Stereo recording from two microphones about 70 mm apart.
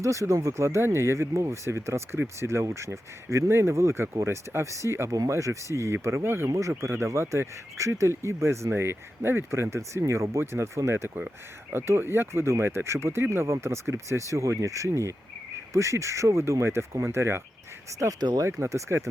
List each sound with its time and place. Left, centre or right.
0.0 s speech: right
18.2 s speech: right
18.6 s speech: right